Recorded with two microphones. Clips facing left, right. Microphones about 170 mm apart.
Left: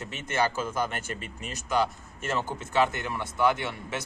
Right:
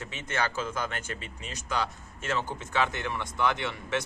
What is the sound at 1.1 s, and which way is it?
Speech, 50° left (ahead or behind).